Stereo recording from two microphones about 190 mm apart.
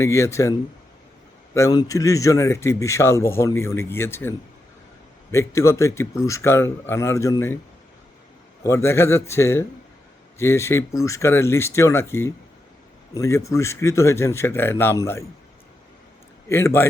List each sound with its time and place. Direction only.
0.0 s a man's voice: 15° left (ahead or behind)
1.5 s a man's voice: 15° left (ahead or behind)
8.6 s a man's voice: 15° left (ahead or behind)
16.5 s a man's voice: 15° left (ahead or behind)